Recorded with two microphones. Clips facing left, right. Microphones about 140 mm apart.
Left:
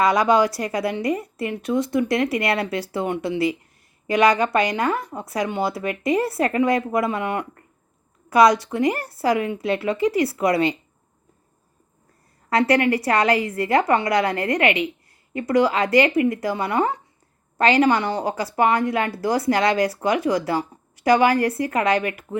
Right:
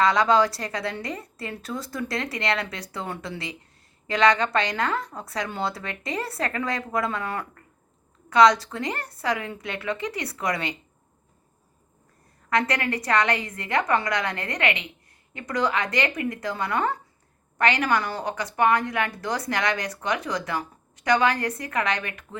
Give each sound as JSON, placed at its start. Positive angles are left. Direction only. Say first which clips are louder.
{"t": 0.0, "sound": "a woman's voice", "louder": "left 3 dB", "side_deg": 25}
{"t": 12.5, "sound": "a woman's voice", "louder": "left 7 dB", "side_deg": 30}